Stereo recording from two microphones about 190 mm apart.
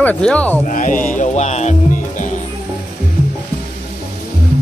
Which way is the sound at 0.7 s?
45° left (ahead or behind).